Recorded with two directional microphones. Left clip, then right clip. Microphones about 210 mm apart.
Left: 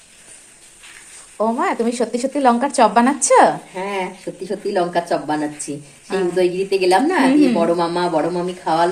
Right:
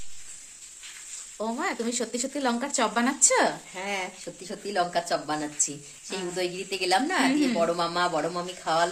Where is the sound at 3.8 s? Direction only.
50° right (ahead or behind).